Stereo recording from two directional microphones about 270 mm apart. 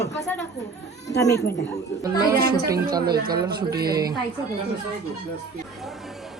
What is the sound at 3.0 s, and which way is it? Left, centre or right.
Speech, right.